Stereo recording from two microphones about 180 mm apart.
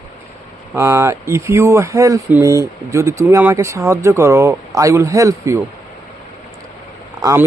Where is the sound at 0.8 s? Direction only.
15° right (ahead or behind).